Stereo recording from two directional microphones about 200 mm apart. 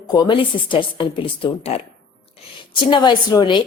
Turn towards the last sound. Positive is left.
turn(degrees=20)  # may be behind; listen again after turning